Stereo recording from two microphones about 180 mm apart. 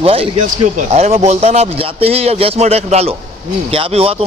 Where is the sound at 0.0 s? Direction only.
30° right (ahead or behind).